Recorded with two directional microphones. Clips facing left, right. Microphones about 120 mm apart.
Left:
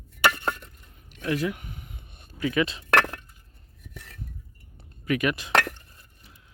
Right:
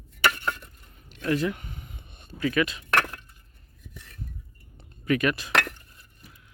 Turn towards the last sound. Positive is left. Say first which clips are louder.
# right 1 dB
turn(degrees=15)  # may be behind; listen again after turning